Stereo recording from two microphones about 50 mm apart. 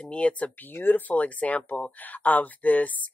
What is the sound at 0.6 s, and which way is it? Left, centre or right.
Speech, left.